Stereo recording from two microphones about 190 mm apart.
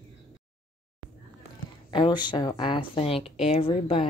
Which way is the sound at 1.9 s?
25° left (ahead or behind).